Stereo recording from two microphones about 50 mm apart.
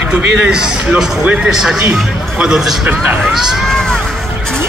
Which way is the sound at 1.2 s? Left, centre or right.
Right.